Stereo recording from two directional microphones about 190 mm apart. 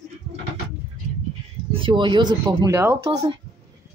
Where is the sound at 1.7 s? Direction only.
25° right (ahead or behind).